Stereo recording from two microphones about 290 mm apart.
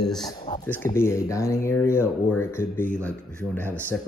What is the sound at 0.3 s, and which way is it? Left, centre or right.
Speech, centre.